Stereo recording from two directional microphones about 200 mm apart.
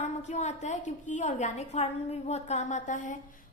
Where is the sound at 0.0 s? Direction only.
35° left (ahead or behind).